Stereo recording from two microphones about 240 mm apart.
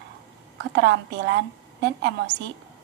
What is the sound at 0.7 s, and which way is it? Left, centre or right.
A woman's voice, right.